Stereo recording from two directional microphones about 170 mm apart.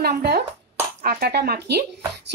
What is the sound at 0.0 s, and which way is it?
A woman's voice, 70° right (ahead or behind).